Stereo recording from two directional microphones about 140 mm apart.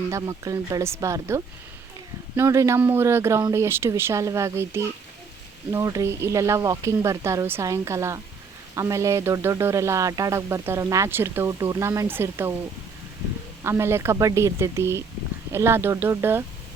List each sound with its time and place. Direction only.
0.1 s speech: 25° right (ahead or behind)
13.7 s speech: 20° right (ahead or behind)